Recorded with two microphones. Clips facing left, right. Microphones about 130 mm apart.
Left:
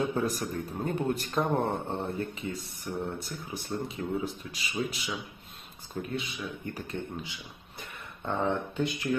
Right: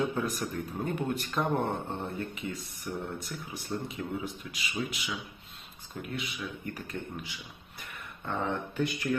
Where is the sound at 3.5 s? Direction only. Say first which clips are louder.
Left 2 dB; 30° left (ahead or behind).